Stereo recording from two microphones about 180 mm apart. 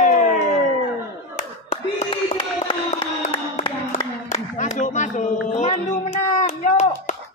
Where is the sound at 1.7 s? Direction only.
35° left (ahead or behind).